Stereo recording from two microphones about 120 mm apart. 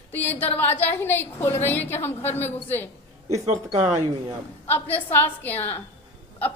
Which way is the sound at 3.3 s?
65° right (ahead or behind).